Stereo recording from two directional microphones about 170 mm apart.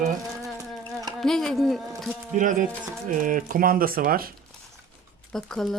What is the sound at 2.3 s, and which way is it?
Speech, 50° right (ahead or behind).